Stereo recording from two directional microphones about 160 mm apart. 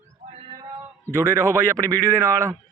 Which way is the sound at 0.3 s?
30° right (ahead or behind).